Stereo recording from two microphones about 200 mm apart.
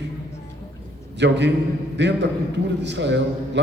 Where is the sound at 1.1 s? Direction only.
60° right (ahead or behind).